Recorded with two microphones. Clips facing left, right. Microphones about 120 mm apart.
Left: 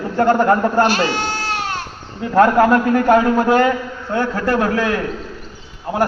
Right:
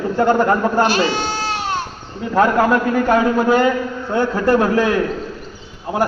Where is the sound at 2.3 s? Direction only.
Centre (ahead or behind).